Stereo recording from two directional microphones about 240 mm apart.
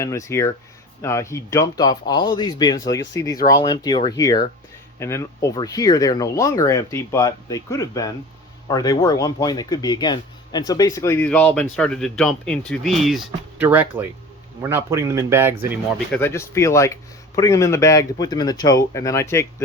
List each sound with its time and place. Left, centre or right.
0.0 s speech: centre
16.1 s speech: centre